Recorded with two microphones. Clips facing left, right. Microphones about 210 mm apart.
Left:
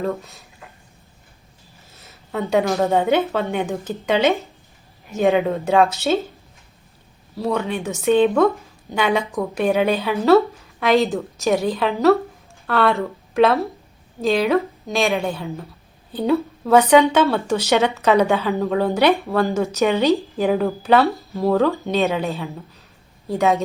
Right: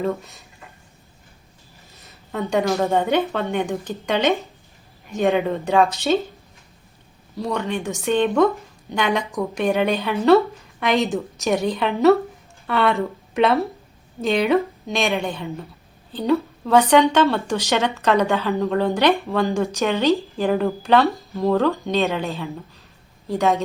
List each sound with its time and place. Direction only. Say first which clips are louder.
0.0 s speech: even; centre (ahead or behind)
2.0 s a woman's voice: left 1 dB; centre (ahead or behind)
7.3 s a woman's voice: left 2 dB; 5° left (ahead or behind)
23.3 s speech: left 1 dB; 5° left (ahead or behind)